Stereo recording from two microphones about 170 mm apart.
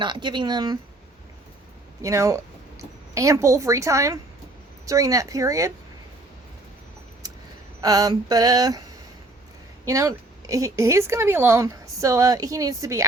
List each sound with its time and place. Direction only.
0.0 s a woman's voice: 25° right (ahead or behind)
2.0 s a woman's voice: 15° right (ahead or behind)
7.8 s a woman's voice: 20° right (ahead or behind)
9.8 s a woman's voice: 20° right (ahead or behind)